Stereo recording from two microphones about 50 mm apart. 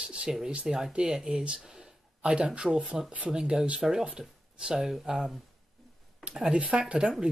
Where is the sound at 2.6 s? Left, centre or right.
Centre.